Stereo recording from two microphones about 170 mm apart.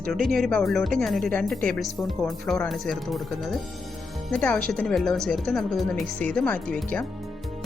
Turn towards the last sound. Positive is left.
turn(degrees=5)  # may be behind; listen again after turning